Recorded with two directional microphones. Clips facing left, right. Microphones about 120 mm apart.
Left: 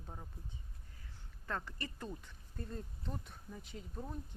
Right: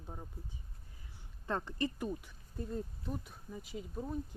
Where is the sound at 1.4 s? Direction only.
25° right (ahead or behind).